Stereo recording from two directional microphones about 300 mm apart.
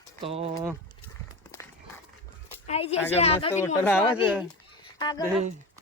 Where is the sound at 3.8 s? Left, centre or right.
Centre.